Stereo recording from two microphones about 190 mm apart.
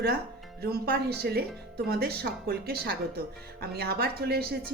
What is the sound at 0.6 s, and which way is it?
A woman's voice, 55° right (ahead or behind).